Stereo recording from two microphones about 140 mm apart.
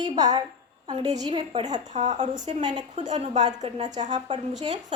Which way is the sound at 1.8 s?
60° right (ahead or behind).